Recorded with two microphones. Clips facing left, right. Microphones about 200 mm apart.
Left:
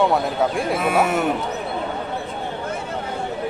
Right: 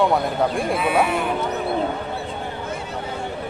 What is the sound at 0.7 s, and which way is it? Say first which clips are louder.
Speech: left 1 dB; 45° left (ahead or behind).